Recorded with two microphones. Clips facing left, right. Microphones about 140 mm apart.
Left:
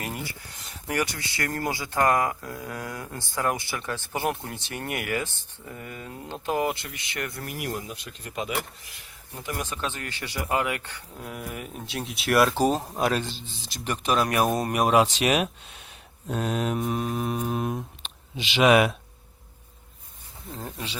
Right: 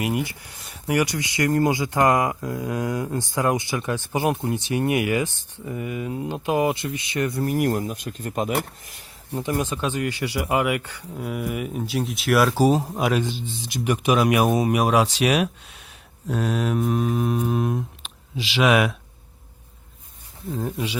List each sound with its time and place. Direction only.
0.3 s speech: 15° right (ahead or behind)
7.4 s speech: 40° right (ahead or behind)
9.4 s speech: 20° right (ahead or behind); by 15.4 s centre (ahead or behind)
16.3 s mantra: centre (ahead or behind)
20.7 s speech: 10° right (ahead or behind)